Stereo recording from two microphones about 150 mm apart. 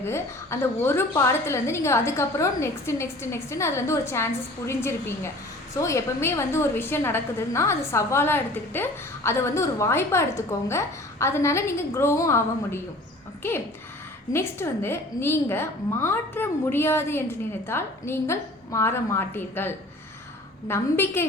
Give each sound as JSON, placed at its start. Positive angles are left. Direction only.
{"t": 0.0, "sound": "a woman's voice", "side_deg": 15}
{"t": 14.3, "sound": "a woman's voice", "side_deg": 15}